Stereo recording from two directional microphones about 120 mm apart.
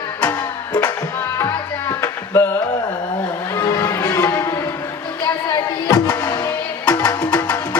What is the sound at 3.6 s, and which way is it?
Music, 30° left (ahead or behind).